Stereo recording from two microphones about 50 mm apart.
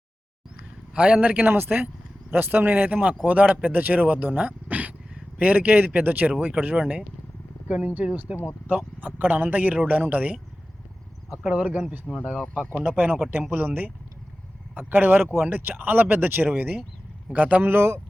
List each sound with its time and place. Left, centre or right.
0.9 s a man's voice: right
1.5 s a man's voice: right
11.4 s a man's voice: right
12.1 s speech: centre
13.5 s a man's voice: right